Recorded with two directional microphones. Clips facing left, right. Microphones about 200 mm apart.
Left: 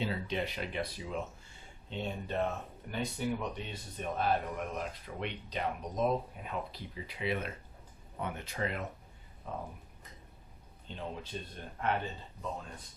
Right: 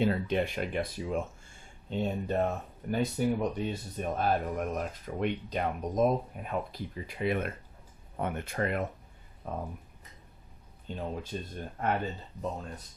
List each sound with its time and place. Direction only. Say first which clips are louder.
0.0 s a man's voice: right 7 dB; 50° right (ahead or behind)
10.8 s a man's voice: right 5 dB; 45° right (ahead or behind)